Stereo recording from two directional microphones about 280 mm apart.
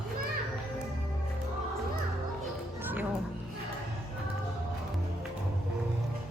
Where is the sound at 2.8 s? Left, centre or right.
Centre.